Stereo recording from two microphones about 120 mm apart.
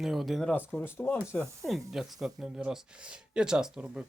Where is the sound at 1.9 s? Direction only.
5° right (ahead or behind).